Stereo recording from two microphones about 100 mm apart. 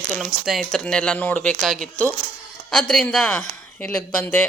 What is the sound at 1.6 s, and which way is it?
A man's voice, centre (ahead or behind).